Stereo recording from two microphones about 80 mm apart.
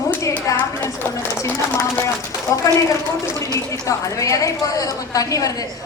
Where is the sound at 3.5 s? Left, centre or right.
Left.